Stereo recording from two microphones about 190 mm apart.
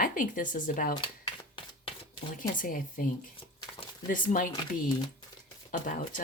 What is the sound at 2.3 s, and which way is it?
Speech, 45° left (ahead or behind).